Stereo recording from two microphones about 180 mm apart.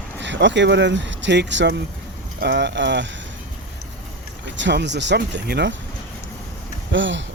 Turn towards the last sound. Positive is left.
turn(degrees=-90)